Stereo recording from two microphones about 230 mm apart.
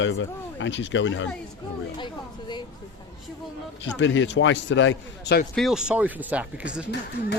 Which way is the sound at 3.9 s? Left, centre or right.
Left.